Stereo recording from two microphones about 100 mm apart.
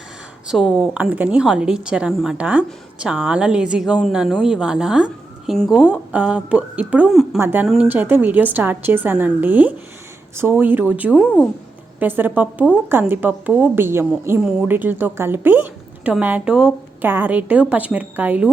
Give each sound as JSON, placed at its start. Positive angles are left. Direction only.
{"t": 0.4, "sound": "speech", "side_deg": -5}
{"t": 1.1, "sound": "a woman's voice", "side_deg": -15}
{"t": 4.3, "sound": "speech", "side_deg": 5}
{"t": 4.5, "sound": "a woman's voice", "side_deg": -5}